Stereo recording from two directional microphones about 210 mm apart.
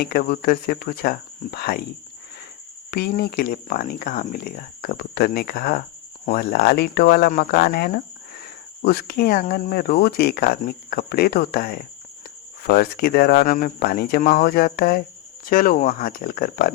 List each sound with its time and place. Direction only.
0.0 s speech: 45° left (ahead or behind)
2.9 s speech: 45° left (ahead or behind)